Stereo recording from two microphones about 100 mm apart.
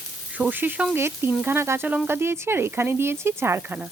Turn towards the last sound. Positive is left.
turn(degrees=-25)  # may be behind; listen again after turning